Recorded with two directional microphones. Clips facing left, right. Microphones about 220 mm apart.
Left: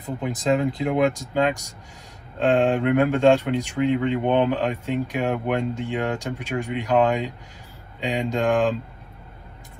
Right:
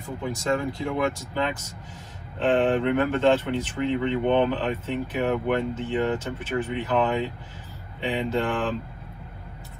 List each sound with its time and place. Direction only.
0.0 s speech: 20° left (ahead or behind)